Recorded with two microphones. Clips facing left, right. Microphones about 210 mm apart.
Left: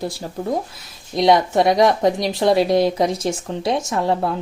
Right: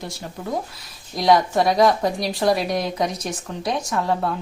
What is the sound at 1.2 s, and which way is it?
A woman's voice, 20° left (ahead or behind).